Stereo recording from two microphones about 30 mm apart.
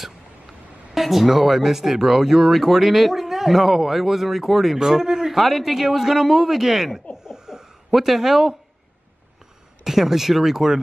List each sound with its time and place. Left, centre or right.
0.9 s speech: centre
5.3 s speech: centre
7.2 s a sound: right
7.9 s speech: centre
9.8 s speech: centre